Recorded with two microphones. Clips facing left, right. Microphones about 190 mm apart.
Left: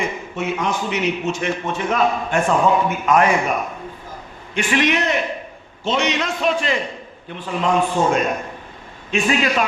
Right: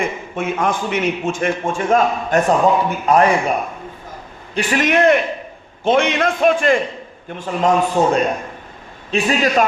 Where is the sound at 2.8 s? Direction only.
35° right (ahead or behind).